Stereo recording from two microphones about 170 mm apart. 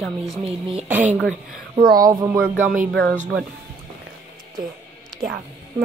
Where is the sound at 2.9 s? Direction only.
5° left (ahead or behind).